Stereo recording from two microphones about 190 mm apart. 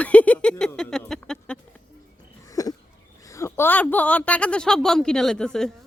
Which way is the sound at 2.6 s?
20° left (ahead or behind).